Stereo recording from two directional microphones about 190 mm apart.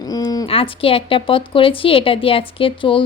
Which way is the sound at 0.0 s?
20° left (ahead or behind).